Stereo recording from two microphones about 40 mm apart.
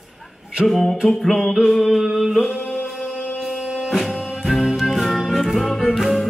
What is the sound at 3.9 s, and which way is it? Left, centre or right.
Music, centre.